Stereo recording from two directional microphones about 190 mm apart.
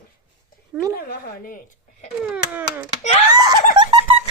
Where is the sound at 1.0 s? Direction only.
50° left (ahead or behind).